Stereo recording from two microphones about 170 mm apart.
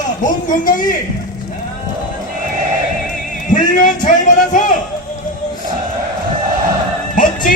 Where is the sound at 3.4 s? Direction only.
50° left (ahead or behind).